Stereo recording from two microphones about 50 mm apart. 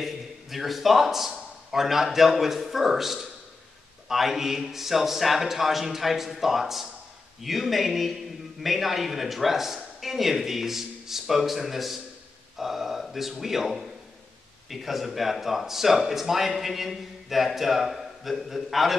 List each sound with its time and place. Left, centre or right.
0.0 s a man's voice: centre